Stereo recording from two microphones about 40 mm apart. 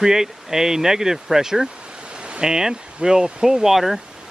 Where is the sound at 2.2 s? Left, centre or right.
Right.